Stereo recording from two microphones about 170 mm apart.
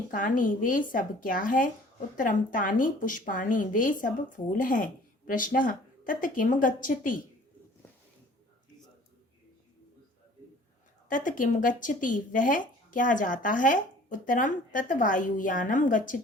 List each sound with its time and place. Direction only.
0.1 s speech: 50° left (ahead or behind)
11.1 s speech: 50° left (ahead or behind)